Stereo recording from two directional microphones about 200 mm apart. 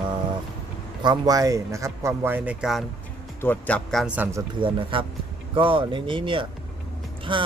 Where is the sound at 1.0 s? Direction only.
20° right (ahead or behind).